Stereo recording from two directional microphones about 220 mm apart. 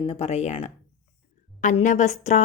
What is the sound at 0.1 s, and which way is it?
A woman's voice, 30° left (ahead or behind).